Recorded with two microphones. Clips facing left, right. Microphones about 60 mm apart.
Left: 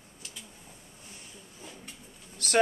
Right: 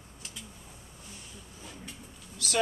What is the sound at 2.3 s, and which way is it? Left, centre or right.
Speech, left.